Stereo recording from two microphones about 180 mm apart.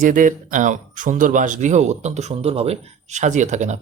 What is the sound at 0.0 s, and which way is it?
Speech, 45° right (ahead or behind).